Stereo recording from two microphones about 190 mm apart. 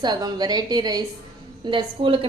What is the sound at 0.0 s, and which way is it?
A woman's voice, 20° right (ahead or behind).